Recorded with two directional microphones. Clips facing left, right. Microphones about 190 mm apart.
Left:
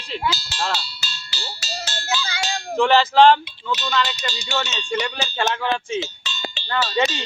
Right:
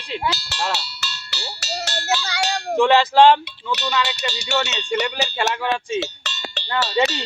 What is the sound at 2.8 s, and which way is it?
Speech, 15° right (ahead or behind).